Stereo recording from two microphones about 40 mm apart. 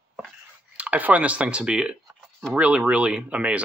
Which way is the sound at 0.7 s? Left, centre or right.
Right.